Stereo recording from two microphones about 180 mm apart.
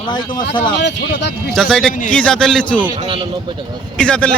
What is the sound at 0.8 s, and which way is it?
Speech, 75° left (ahead or behind).